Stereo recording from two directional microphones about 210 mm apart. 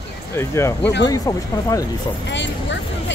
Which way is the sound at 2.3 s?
60° left (ahead or behind).